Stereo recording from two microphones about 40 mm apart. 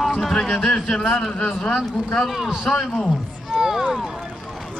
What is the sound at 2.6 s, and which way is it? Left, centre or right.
Speech, centre.